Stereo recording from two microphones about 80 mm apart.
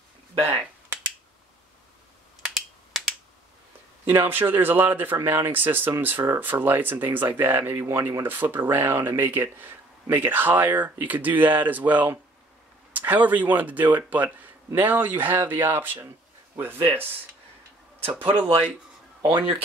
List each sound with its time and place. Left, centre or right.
2.4 s finger snapping: centre
4.0 s speech: right
18.3 s speech: right